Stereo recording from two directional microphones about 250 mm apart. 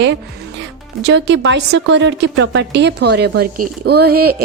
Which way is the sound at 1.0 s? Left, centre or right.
Right.